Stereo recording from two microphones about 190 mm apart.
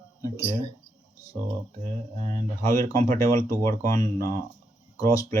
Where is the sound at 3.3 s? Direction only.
15° left (ahead or behind).